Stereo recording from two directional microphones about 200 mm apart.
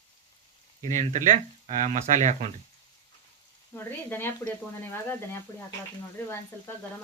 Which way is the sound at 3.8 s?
10° left (ahead or behind).